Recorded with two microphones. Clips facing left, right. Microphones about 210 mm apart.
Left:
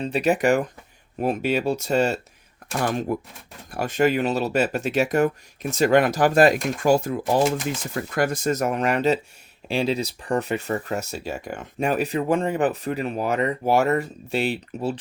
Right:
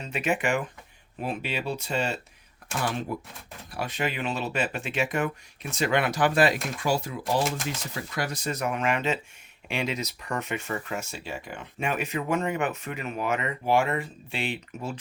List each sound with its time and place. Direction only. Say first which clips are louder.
0.0 s speech: left 7 dB; 35° left (ahead or behind)